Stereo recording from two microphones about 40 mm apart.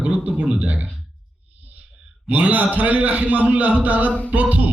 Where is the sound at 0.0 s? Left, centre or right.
Right.